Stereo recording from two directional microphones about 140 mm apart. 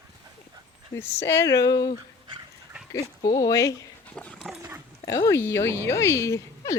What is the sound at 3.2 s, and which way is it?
Speech, 25° left (ahead or behind).